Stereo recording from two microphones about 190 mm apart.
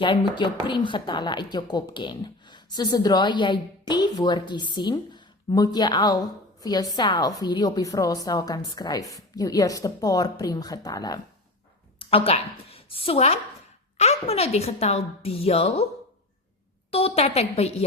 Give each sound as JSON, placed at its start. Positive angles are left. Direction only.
{"t": 0.0, "sound": "speech", "side_deg": 25}
{"t": 11.9, "sound": "a woman's voice", "side_deg": 30}
{"t": 16.9, "sound": "a woman's voice", "side_deg": 30}